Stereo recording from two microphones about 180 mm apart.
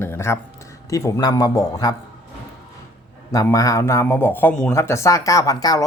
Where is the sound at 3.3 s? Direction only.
20° left (ahead or behind).